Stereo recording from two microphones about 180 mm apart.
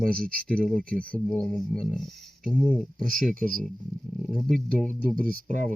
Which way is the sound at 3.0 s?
50° right (ahead or behind).